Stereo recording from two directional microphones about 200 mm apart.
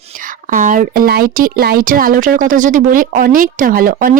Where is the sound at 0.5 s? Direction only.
40° right (ahead or behind).